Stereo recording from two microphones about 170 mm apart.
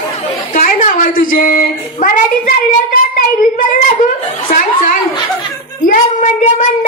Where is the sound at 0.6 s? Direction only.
55° left (ahead or behind).